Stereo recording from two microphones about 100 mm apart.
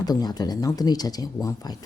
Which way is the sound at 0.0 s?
40° left (ahead or behind).